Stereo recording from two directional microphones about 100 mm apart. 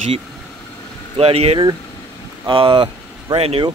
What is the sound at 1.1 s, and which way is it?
Speech, 80° right.